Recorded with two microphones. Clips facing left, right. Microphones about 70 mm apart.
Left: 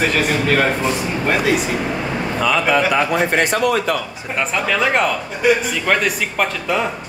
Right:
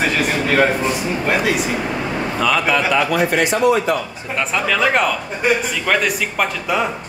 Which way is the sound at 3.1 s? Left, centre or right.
Left.